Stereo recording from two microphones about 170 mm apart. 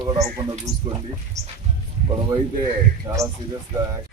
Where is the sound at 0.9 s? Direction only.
20° right (ahead or behind).